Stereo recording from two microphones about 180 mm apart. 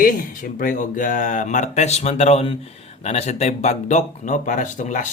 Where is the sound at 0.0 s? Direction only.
50° left (ahead or behind).